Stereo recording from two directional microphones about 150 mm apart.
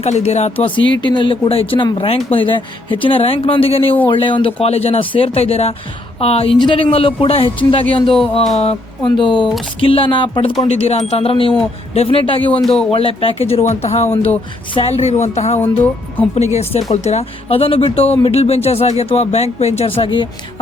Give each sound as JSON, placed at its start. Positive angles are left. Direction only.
{"t": 0.0, "sound": "speech", "side_deg": 45}
{"t": 1.0, "sound": "speech", "side_deg": 30}
{"t": 10.7, "sound": "speech", "side_deg": 45}
{"t": 12.6, "sound": "speech", "side_deg": 5}
{"t": 12.9, "sound": "speech", "side_deg": 40}
{"t": 15.6, "sound": "speech", "side_deg": 10}
{"t": 16.6, "sound": "speech", "side_deg": 45}
{"t": 20.0, "sound": "speech", "side_deg": 35}